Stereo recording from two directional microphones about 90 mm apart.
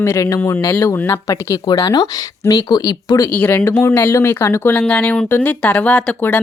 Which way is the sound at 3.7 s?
30° left (ahead or behind).